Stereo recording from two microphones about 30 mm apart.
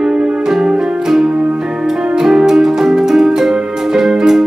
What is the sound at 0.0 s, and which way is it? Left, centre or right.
Music, centre.